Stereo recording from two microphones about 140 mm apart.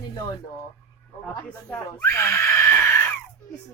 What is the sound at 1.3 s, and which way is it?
Speech, 25° left (ahead or behind).